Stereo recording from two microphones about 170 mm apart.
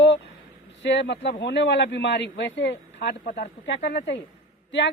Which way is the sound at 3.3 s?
65° left (ahead or behind).